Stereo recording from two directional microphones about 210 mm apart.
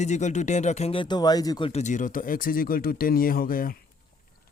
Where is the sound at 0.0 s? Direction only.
35° left (ahead or behind).